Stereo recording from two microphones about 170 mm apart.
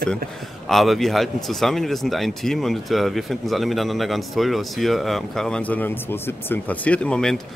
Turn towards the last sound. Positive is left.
turn(degrees=5)  # may be behind; listen again after turning